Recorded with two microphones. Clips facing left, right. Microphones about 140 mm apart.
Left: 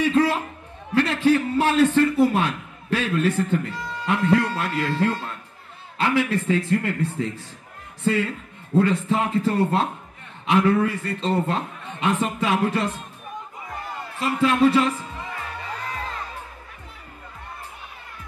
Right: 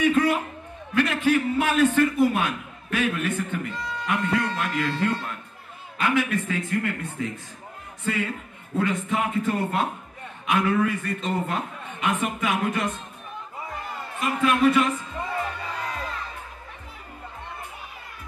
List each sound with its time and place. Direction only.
0.0 s a sound: 30° left (ahead or behind)
2.1 s a man's voice: 30° left (ahead or behind)
4.0 s music: 30° left (ahead or behind)
5.9 s a man's voice: 30° left (ahead or behind)
14.2 s a man's voice: 30° left (ahead or behind)